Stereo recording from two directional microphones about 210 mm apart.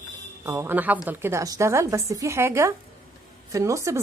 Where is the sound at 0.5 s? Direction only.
10° right (ahead or behind).